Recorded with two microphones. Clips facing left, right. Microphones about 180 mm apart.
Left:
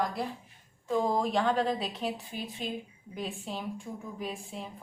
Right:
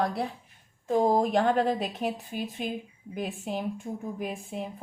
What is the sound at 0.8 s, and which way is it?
A woman's voice, 45° right (ahead or behind).